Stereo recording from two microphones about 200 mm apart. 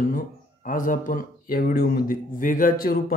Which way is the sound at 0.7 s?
40° left (ahead or behind).